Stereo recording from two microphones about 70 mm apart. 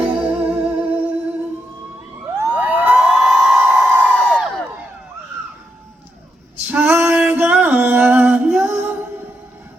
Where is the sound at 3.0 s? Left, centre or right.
Centre.